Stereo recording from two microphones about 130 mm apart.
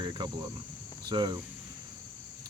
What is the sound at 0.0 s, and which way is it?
Speech, 35° right (ahead or behind).